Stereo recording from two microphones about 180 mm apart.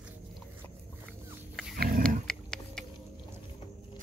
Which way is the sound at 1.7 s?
55° right (ahead or behind).